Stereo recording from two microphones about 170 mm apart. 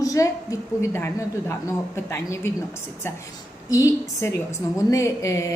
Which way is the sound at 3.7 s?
20° left (ahead or behind).